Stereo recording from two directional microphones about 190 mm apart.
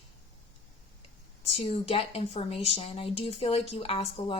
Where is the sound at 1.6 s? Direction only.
30° left (ahead or behind).